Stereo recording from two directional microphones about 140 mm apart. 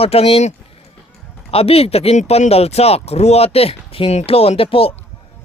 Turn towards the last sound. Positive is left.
turn(degrees=40)  # may be behind; listen again after turning